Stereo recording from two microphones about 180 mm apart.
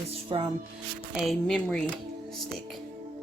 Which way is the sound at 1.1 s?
Centre (ahead or behind).